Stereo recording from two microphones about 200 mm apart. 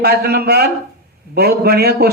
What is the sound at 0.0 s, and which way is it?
Speech, 50° right (ahead or behind).